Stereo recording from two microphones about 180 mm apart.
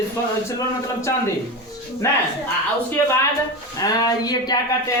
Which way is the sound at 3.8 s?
20° left (ahead or behind).